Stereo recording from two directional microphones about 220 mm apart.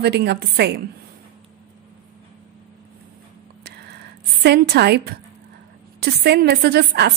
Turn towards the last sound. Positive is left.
turn(degrees=-45)  # may be behind; listen again after turning